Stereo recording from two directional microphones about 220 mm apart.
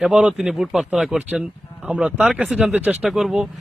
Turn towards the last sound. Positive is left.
turn(degrees=0)  # may be behind; listen again after turning